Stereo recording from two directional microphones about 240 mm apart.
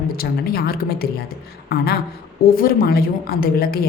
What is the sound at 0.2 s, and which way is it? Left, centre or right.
Speech, left.